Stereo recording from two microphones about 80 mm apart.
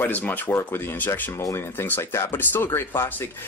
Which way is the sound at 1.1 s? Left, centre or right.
Left.